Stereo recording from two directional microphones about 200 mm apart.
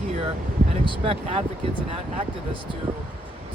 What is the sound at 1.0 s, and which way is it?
Speech, 30° right (ahead or behind).